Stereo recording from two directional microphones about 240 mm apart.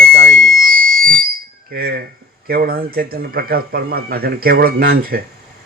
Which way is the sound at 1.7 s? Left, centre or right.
Right.